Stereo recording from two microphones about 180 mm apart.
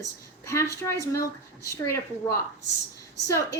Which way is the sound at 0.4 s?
15° left (ahead or behind).